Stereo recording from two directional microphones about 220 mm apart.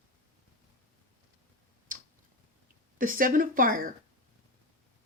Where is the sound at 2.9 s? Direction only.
40° right (ahead or behind).